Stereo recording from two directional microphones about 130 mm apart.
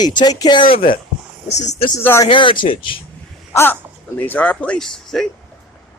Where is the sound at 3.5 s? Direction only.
15° left (ahead or behind).